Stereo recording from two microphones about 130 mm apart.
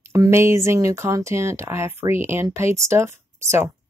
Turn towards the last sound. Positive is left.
turn(degrees=-20)  # may be behind; listen again after turning